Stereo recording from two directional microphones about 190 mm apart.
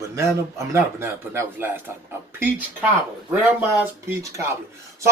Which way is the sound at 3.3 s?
5° right (ahead or behind).